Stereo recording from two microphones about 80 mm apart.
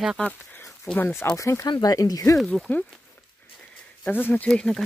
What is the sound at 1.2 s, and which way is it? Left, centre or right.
Speech, left.